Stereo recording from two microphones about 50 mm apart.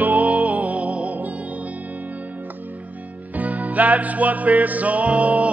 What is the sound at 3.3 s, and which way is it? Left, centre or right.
Music, right.